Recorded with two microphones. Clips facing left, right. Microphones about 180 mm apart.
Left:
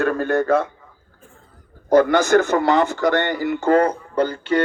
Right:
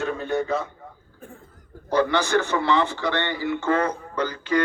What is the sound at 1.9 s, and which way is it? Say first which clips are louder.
A man's voice: left 7 dB; 45° left (ahead or behind).